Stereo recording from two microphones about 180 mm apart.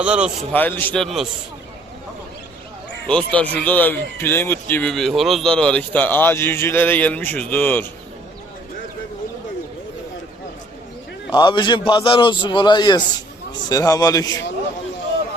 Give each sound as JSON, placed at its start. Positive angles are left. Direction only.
{"t": 0.0, "sound": "a man's voice", "side_deg": -5}
{"t": 0.5, "sound": "speech", "side_deg": 10}
{"t": 3.1, "sound": "speech", "side_deg": 5}
{"t": 11.3, "sound": "a man's voice", "side_deg": 25}